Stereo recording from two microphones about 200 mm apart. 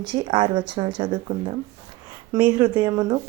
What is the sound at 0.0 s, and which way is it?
A woman's voice, 25° right (ahead or behind).